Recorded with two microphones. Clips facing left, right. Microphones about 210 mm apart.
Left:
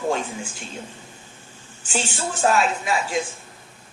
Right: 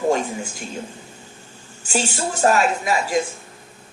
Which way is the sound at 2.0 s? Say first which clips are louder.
Right 2 dB; 40° right (ahead or behind).